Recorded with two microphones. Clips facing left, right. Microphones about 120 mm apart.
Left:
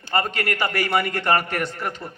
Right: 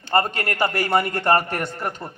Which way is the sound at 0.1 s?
40° right (ahead or behind).